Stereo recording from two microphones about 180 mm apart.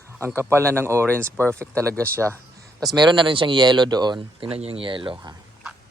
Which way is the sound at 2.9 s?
25° right (ahead or behind).